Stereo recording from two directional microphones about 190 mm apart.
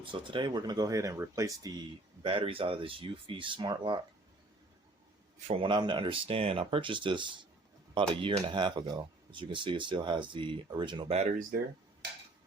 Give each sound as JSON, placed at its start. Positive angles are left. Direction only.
{"t": 0.0, "sound": "speech", "side_deg": -25}
{"t": 2.2, "sound": "speech", "side_deg": -30}
{"t": 5.5, "sound": "speech", "side_deg": -30}